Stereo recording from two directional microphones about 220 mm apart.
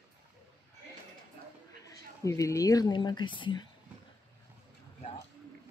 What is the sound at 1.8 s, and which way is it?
Speech, 15° left (ahead or behind).